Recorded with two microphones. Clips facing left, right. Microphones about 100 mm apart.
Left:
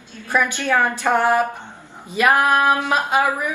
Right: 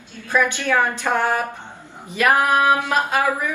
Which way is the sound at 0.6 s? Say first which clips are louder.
Left 1 dB; 15° left (ahead or behind).